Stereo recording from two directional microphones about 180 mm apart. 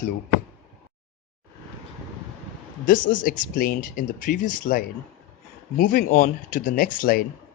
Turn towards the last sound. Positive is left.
turn(degrees=50)  # may be behind; listen again after turning